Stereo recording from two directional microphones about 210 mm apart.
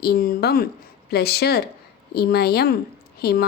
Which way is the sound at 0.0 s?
45° left (ahead or behind).